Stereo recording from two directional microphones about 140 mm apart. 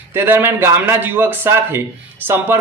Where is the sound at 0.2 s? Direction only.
15° right (ahead or behind).